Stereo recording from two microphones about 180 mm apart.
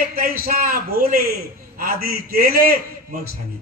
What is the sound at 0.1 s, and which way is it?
A man's voice, 55° right (ahead or behind).